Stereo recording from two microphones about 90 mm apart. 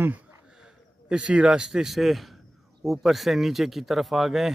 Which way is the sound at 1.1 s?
10° right (ahead or behind).